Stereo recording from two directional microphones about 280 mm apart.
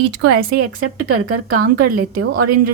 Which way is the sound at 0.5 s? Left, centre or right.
Right.